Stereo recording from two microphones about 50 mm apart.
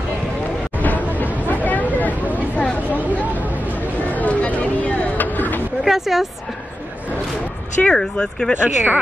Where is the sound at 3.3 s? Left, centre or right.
Right.